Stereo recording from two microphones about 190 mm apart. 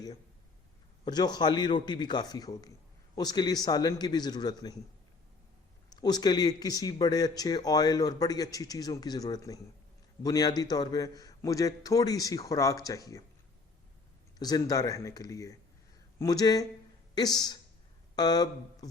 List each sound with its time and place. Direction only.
1.0 s speech: 20° left (ahead or behind)
5.9 s speech: 20° left (ahead or behind)
14.3 s speech: 20° left (ahead or behind)